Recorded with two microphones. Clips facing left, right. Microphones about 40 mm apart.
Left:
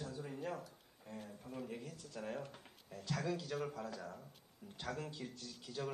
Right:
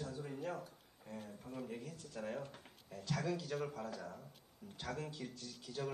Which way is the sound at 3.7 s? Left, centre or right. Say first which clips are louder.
Even; right.